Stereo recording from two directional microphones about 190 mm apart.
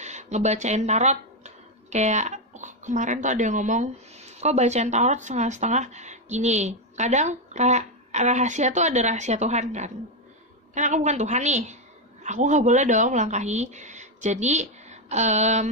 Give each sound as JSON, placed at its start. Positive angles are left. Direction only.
{"t": 0.0, "sound": "a woman's voice", "side_deg": -35}